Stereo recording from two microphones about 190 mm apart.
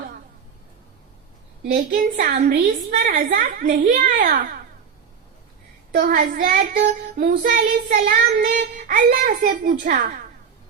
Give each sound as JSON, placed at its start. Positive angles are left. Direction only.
{"t": 1.9, "sound": "child singing", "side_deg": -45}
{"t": 6.0, "sound": "child singing", "side_deg": -45}